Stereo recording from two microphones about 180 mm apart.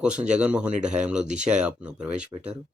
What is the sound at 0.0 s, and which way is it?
Speech, 5° right (ahead or behind).